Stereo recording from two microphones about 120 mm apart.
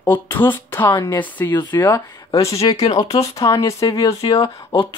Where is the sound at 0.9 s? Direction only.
30° left (ahead or behind).